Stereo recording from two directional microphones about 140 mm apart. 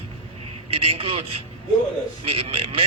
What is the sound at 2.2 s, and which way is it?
Speech, 45° right (ahead or behind).